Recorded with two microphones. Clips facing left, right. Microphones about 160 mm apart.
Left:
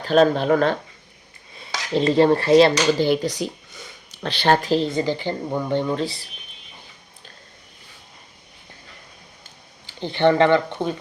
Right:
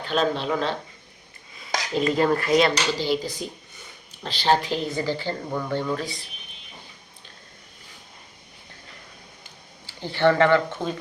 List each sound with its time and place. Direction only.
0.0 s speech: 45° left (ahead or behind)
1.9 s speech: 30° left (ahead or behind)
3.0 s speech: 60° left (ahead or behind)
4.9 s speech: 20° left (ahead or behind)
9.8 s speech: 20° left (ahead or behind)